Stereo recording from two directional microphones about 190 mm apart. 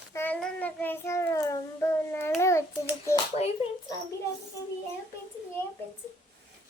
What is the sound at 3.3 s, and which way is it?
Speech, 35° left (ahead or behind).